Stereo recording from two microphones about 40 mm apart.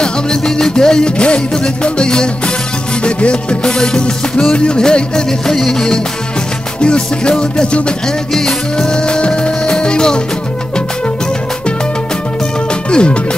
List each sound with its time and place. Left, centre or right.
0.0 s music: centre
3.7 s music: centre
6.8 s music: left
12.9 s speech: left